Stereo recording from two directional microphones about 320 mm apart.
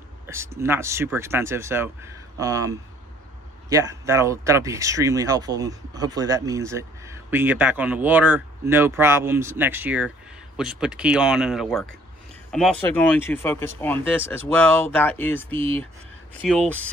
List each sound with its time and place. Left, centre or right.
0.3 s speech: centre
15.5 s speech: centre
16.3 s speech: centre